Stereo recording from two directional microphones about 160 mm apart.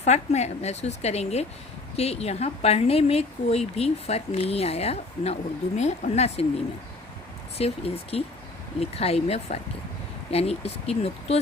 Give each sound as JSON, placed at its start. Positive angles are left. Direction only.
{"t": 0.0, "sound": "a woman's voice", "side_deg": 45}
{"t": 7.6, "sound": "speech", "side_deg": 40}